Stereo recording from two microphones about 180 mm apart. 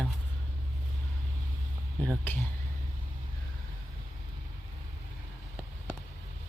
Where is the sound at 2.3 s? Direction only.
10° left (ahead or behind).